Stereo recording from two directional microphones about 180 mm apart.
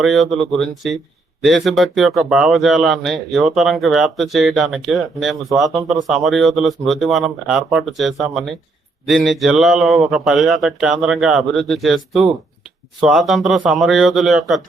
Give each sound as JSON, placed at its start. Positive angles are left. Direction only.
{"t": 0.0, "sound": "speech", "side_deg": 0}